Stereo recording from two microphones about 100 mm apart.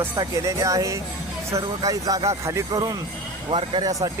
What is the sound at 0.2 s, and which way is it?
Speech, 35° right (ahead or behind).